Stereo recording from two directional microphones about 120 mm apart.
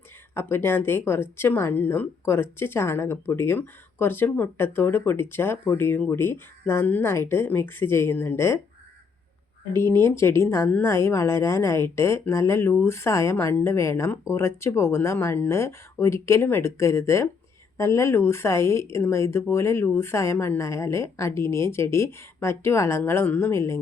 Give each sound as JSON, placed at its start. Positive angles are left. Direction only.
{"t": 0.3, "sound": "a woman's voice", "side_deg": 20}
{"t": 9.7, "sound": "a woman's voice", "side_deg": 20}